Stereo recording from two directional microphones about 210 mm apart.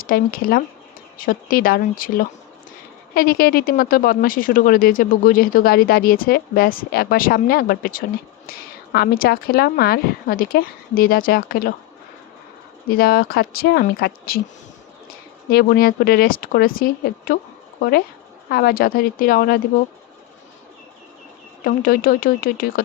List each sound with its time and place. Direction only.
0.0 s speech: 45° left (ahead or behind)
13.0 s speech: 45° left (ahead or behind)
15.4 s speech: 45° left (ahead or behind)
21.6 s speech: 45° left (ahead or behind)